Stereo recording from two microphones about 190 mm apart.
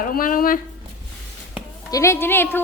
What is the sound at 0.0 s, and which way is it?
Speech, 45° left (ahead or behind).